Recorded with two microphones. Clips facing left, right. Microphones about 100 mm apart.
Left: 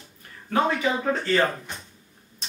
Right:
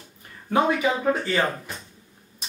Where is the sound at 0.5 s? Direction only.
15° right (ahead or behind).